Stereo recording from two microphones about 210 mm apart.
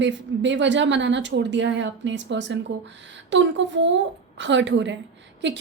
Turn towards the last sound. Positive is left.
turn(degrees=-55)  # may be behind; listen again after turning